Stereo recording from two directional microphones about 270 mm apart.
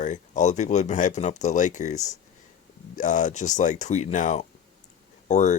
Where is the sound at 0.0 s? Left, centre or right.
Left.